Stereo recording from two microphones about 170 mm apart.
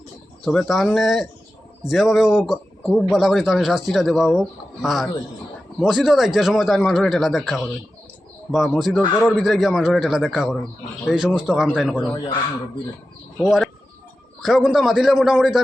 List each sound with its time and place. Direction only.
0.4 s a man's voice: centre (ahead or behind)
12.0 s speech: 20° left (ahead or behind)
13.4 s a man's voice: centre (ahead or behind)